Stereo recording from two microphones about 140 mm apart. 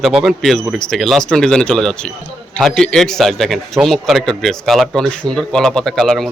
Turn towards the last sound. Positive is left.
turn(degrees=0)  # may be behind; listen again after turning